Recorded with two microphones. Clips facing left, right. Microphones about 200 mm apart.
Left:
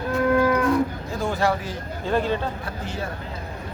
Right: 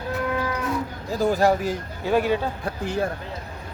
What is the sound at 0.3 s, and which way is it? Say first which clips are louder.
Moo: left 10 dB; 50° left (ahead or behind).